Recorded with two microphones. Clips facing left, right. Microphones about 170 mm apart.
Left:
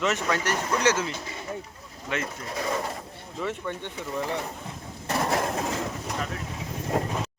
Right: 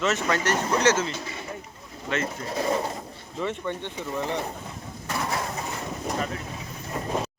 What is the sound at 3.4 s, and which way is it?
Speech, 5° left (ahead or behind).